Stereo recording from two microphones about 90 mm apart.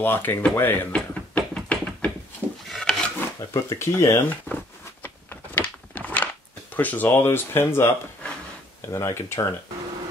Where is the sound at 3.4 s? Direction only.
35° left (ahead or behind).